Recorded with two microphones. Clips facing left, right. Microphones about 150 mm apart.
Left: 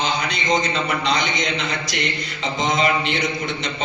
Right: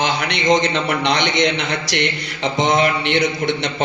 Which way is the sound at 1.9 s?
75° right (ahead or behind).